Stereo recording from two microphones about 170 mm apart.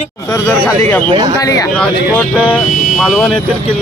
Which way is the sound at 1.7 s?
5° left (ahead or behind).